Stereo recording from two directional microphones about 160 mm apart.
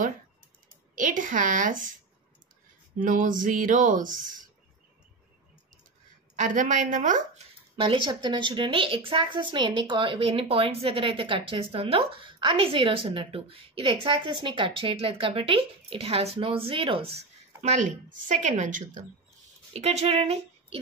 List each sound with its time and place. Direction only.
0.9 s speech: 55° right (ahead or behind)
3.0 s speech: 55° right (ahead or behind)
6.3 s a woman's voice: 50° right (ahead or behind)
7.7 s speech: 30° right (ahead or behind)
17.6 s a woman's voice: 50° right (ahead or behind)
19.7 s speech: 40° right (ahead or behind)